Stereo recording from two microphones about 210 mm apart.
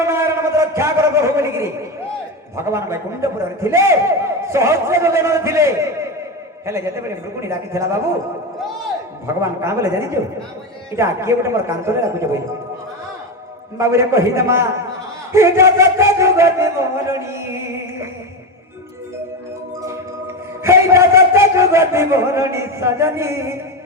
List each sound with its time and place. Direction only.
0.0 s a sound: 15° right (ahead or behind)
2.6 s a man's voice: 15° right (ahead or behind)
9.2 s a man's voice: 15° right (ahead or behind)
13.7 s a man's voice: 15° right (ahead or behind)
20.7 s a man's voice: 15° right (ahead or behind)